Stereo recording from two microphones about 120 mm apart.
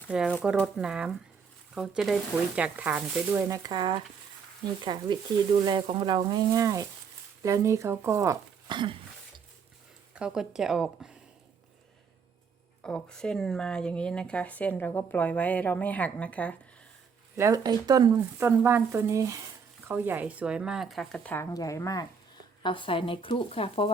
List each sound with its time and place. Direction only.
0.1 s speech: 10° right (ahead or behind)
3.5 s a woman's voice: 35° right (ahead or behind)
8.7 s speech: 40° right (ahead or behind)
10.2 s speech: 5° right (ahead or behind)
12.8 s speech: 5° left (ahead or behind)
17.3 s speech: 20° right (ahead or behind)
17.6 s speech: 35° right (ahead or behind)
18.3 s a woman's voice: 20° right (ahead or behind)
19.9 s speech: 15° right (ahead or behind); by 21.3 s 5° left (ahead or behind)
21.5 s speech: 30° left (ahead or behind)
22.6 s speech: 45° left (ahead or behind)